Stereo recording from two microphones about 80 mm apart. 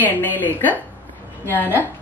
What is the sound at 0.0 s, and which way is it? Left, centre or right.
A man's voice, left.